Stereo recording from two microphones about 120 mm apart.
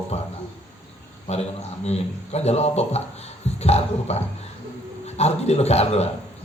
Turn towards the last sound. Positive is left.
turn(degrees=60)  # may be behind; listen again after turning